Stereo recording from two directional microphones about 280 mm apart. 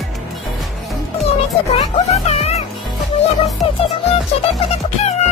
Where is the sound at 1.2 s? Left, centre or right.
Left.